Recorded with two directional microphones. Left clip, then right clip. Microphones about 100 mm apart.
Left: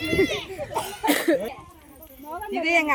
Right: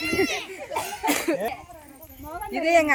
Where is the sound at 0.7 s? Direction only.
30° left (ahead or behind).